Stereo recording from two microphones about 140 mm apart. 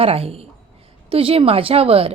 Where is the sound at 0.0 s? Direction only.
45° right (ahead or behind).